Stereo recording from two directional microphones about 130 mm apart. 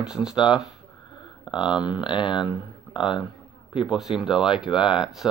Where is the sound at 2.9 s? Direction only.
35° left (ahead or behind).